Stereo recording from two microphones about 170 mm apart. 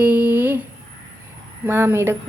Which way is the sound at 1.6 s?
15° right (ahead or behind).